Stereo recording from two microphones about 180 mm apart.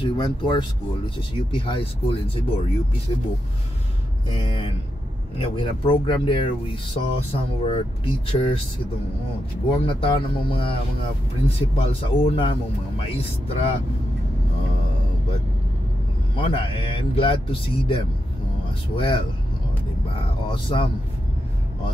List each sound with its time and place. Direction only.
0.0 s speech: 25° left (ahead or behind)
5.4 s speech: 30° left (ahead or behind)
9.8 s speech: 30° left (ahead or behind)
16.3 s speech: 30° left (ahead or behind)
20.4 s speech: 30° left (ahead or behind)